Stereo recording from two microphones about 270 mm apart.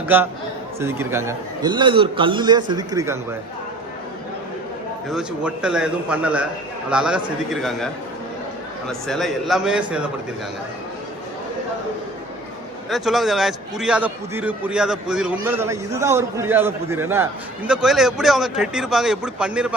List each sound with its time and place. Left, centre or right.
0.1 s a man's voice: centre
5.0 s a man's voice: centre
8.9 s a man's voice: centre
12.9 s a man's voice: centre